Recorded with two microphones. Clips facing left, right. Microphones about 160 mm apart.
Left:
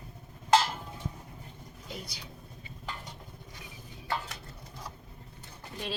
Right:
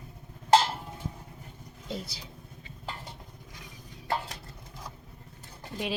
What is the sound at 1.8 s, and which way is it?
Vehicle, 30° right (ahead or behind).